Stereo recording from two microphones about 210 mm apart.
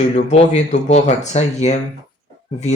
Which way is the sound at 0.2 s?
30° left (ahead or behind).